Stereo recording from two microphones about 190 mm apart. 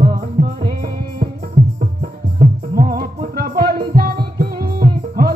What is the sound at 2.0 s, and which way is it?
Music, 50° right (ahead or behind).